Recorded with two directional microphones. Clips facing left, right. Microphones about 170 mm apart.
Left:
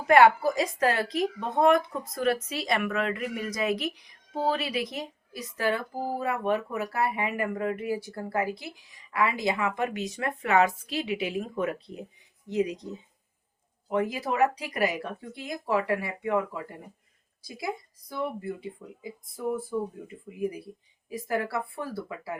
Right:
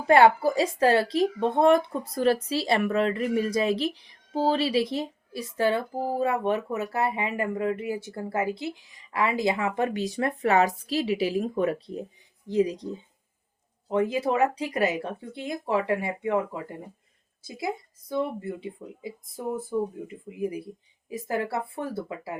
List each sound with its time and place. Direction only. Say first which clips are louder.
0.1 s a woman's voice: right 1 dB; 30° right (ahead or behind)
19.7 s speech: right 3 dB; 25° right (ahead or behind)